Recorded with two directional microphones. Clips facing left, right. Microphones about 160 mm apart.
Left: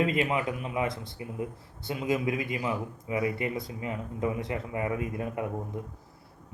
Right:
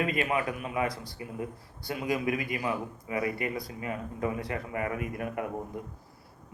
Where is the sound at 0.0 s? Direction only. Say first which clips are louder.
Left 2 dB; 25° left (ahead or behind).